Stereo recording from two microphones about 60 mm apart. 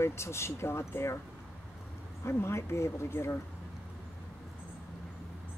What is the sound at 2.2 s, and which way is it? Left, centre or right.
Speech, left.